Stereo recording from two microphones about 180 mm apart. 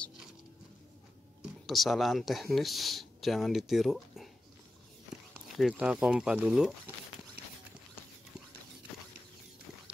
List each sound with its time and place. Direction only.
1.4 s speech: centre (ahead or behind)
5.6 s speech: 5° right (ahead or behind)